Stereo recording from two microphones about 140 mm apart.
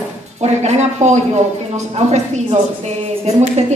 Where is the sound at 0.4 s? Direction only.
55° right (ahead or behind).